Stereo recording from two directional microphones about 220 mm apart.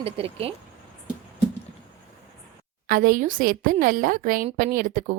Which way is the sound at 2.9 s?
40° right (ahead or behind).